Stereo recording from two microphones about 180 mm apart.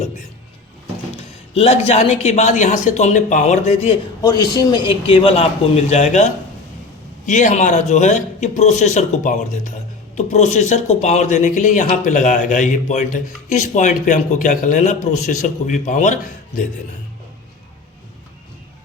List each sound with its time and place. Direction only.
1.5 s a man's voice: 35° left (ahead or behind)
4.2 s a man's voice: 20° left (ahead or behind); by 16.1 s 45° left (ahead or behind)